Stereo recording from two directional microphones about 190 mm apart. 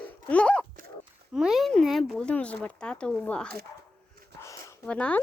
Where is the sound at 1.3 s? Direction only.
5° right (ahead or behind).